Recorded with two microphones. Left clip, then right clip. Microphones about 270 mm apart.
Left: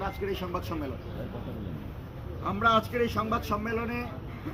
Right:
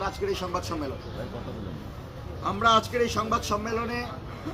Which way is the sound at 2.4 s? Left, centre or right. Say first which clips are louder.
Right 3 dB; right.